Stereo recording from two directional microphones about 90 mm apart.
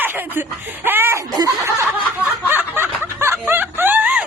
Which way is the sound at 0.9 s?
25° right (ahead or behind).